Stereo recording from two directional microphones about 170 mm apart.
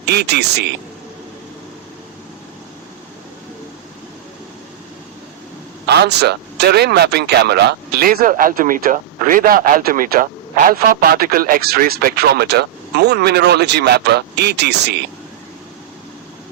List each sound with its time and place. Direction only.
0.1 s speech: 75° right (ahead or behind)
5.9 s speech: 80° right